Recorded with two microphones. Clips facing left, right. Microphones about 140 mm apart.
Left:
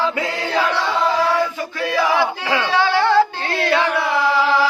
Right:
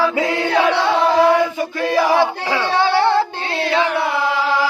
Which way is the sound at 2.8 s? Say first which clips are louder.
Even; 30° right (ahead or behind).